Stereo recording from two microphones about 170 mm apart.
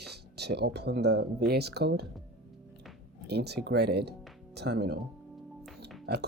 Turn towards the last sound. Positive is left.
turn(degrees=-75)  # may be behind; listen again after turning